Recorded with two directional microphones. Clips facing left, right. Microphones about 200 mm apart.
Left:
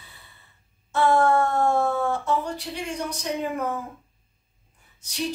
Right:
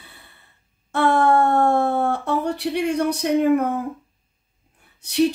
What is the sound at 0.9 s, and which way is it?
Speech, 60° right (ahead or behind).